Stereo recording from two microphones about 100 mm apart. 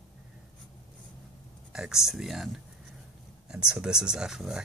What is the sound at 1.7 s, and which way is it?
Speech, 5° right (ahead or behind).